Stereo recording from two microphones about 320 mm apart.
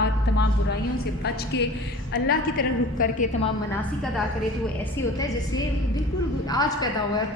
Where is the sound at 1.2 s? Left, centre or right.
Left.